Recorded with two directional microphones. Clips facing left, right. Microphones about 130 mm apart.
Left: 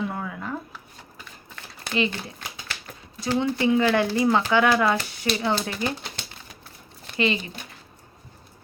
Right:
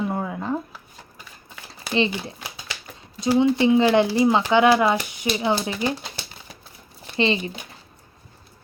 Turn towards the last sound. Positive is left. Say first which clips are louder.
# right 3 dB
turn(degrees=-30)  # may be behind; listen again after turning